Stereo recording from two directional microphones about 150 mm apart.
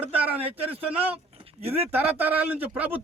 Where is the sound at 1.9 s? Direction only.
10° right (ahead or behind).